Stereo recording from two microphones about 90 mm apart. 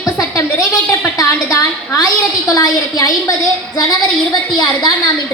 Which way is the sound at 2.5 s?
45° left (ahead or behind).